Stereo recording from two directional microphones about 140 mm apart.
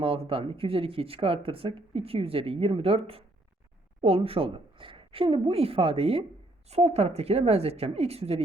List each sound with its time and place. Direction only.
0.0 s speech: 40° right (ahead or behind)